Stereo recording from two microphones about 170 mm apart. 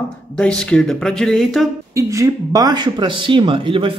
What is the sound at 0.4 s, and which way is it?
A man's voice, 5° left (ahead or behind).